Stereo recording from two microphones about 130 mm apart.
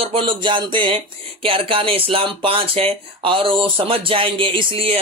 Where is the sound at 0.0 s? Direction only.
45° right (ahead or behind).